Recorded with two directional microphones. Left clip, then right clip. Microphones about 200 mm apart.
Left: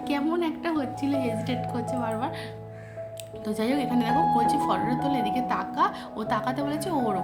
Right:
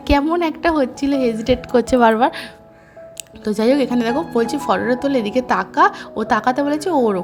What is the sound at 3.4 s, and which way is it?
A woman's voice, 35° right (ahead or behind).